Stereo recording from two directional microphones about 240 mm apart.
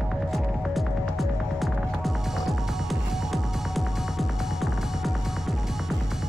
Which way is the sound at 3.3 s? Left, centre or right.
Centre.